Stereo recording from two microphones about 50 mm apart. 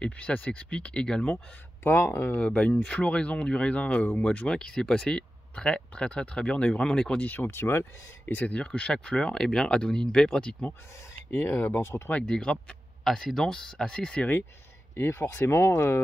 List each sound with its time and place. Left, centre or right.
0.0 s speech: left
2.0 s speech: left
2.3 s speech: centre
7.2 s speech: left
8.5 s speech: left
11.2 s speech: left
12.1 s speech: left
13.0 s speech: centre
15.1 s speech: left